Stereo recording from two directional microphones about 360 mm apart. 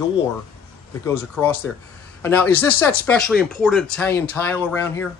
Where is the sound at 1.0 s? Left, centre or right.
Centre.